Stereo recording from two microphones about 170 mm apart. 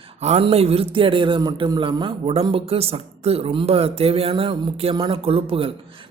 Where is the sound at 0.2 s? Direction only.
40° right (ahead or behind).